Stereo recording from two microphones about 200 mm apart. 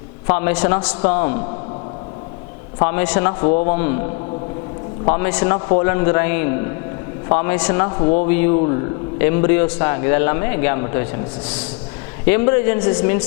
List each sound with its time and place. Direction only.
0.3 s a man's voice: 25° left (ahead or behind)
2.7 s a man's voice: 25° left (ahead or behind)
5.0 s a man's voice: 25° left (ahead or behind)
9.1 s a man's voice: 20° left (ahead or behind)
12.5 s a man's voice: 25° left (ahead or behind)